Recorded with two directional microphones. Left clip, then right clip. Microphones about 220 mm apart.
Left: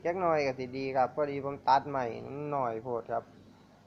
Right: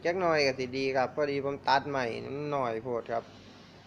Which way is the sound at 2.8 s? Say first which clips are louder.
Right 1 dB; 25° right (ahead or behind).